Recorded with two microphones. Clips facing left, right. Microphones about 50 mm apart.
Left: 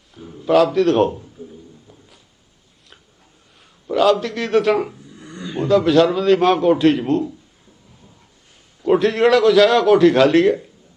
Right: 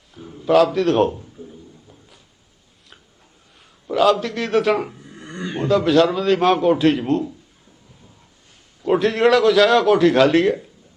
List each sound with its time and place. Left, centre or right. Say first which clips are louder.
0.1 s a man's voice: even; centre
1.9 s a sound: left 1 dB; centre
3.8 s a man's voice: left 1 dB; centre
5.0 s dog: right 3 dB; right
5.6 s a man's voice: left 2 dB; centre
8.8 s a man's voice: left 1 dB; centre